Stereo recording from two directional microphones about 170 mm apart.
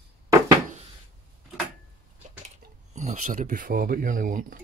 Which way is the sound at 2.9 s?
45° right (ahead or behind).